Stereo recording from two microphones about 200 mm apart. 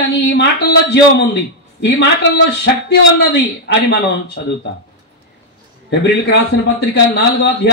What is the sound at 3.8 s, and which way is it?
Speech, 55° left (ahead or behind).